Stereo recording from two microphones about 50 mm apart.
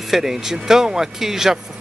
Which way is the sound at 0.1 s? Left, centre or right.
Centre.